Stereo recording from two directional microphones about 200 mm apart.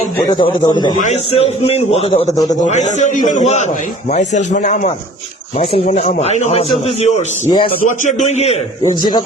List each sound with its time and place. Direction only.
0.2 s a man's voice: 25° left (ahead or behind)
0.9 s a man's voice: 35° left (ahead or behind)
8.8 s a man's voice: 20° left (ahead or behind)